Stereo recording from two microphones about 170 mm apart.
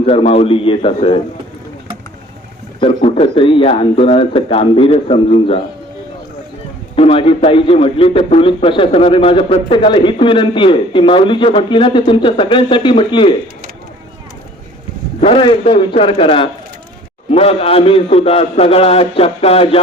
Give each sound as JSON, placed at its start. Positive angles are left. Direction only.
{"t": 0.0, "sound": "a man's voice", "side_deg": 35}
{"t": 2.8, "sound": "a man's voice", "side_deg": 35}
{"t": 6.9, "sound": "a man's voice", "side_deg": 35}
{"t": 15.2, "sound": "a man's voice", "side_deg": 30}